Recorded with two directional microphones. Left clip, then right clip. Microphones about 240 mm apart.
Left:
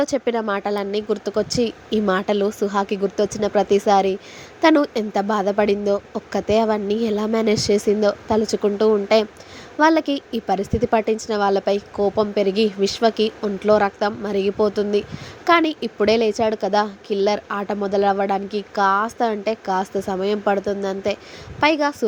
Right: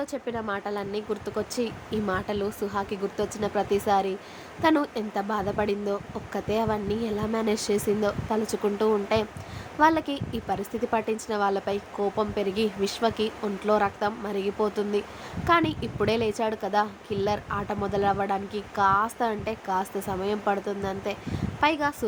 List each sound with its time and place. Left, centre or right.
0.0 s a woman's voice: left